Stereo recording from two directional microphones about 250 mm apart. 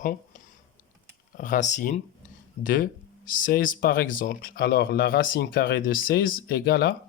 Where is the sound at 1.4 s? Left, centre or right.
Left.